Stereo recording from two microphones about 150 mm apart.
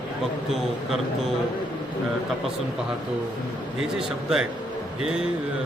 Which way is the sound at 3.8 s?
5° right (ahead or behind).